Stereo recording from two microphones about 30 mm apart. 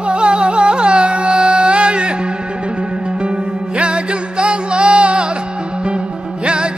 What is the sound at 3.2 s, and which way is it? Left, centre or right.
Music, right.